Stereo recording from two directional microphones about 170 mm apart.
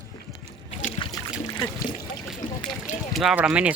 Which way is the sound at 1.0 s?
30° left (ahead or behind).